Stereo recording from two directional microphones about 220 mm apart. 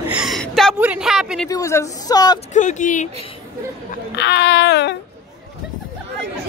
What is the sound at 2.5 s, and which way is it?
Speech, 35° left (ahead or behind).